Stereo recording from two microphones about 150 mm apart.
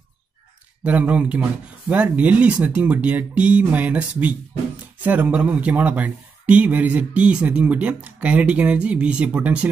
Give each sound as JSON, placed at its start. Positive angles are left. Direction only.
{"t": 0.8, "sound": "speech", "side_deg": -10}